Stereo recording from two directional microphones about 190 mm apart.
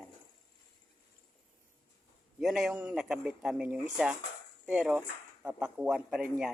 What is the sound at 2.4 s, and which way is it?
Speech, 5° right (ahead or behind).